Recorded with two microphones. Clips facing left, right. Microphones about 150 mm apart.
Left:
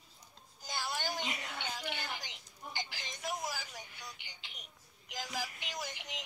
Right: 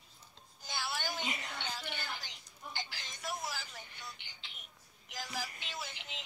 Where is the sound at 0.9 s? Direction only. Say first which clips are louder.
Left 2 dB; 20° left (ahead or behind).